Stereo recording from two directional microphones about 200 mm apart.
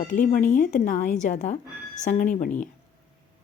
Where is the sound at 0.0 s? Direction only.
35° left (ahead or behind).